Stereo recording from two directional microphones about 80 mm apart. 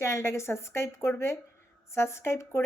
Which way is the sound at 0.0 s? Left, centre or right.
Left.